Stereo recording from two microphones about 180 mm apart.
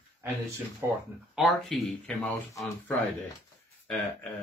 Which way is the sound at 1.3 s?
Centre (ahead or behind).